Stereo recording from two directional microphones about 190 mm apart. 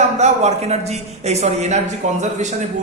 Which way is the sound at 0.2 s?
35° right (ahead or behind).